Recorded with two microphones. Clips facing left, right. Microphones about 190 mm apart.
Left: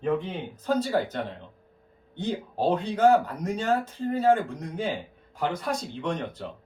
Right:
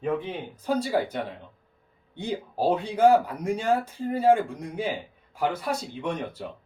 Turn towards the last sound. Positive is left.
turn(degrees=-10)  # may be behind; listen again after turning